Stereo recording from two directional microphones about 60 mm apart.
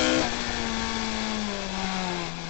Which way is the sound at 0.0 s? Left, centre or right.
Left.